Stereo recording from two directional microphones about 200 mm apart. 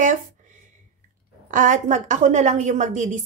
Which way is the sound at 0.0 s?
40° right (ahead or behind).